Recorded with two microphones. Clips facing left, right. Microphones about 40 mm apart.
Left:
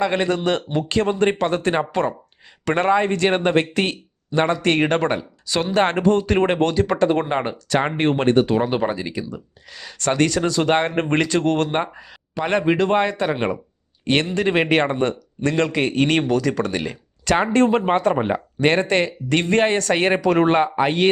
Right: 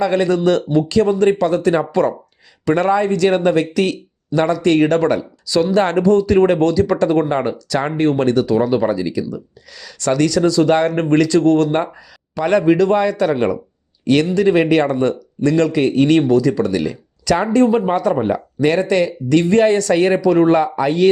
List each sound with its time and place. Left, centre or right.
0.0 s speech: left
12.4 s a man's voice: left